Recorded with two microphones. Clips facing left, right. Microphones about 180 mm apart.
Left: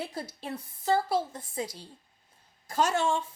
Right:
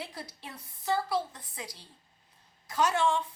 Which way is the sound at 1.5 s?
25° left (ahead or behind).